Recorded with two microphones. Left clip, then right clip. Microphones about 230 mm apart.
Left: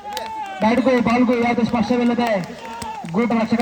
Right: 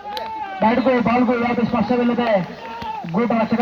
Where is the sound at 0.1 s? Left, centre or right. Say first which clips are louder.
Even; left.